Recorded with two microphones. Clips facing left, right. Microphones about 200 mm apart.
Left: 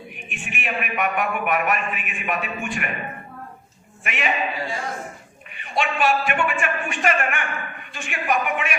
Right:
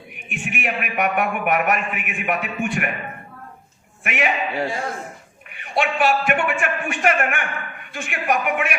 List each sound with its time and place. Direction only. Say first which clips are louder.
0.3 s a man's voice: right 4 dB; 65° right (ahead or behind)
4.0 s a man's voice: right 2 dB; 55° right (ahead or behind)